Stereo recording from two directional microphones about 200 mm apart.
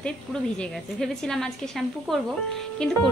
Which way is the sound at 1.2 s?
5° left (ahead or behind).